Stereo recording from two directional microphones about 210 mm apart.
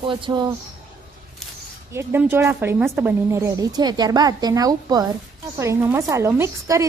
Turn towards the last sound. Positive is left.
turn(degrees=-15)  # may be behind; listen again after turning